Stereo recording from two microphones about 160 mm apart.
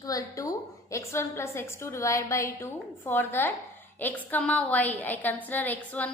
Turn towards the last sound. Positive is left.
turn(degrees=10)  # may be behind; listen again after turning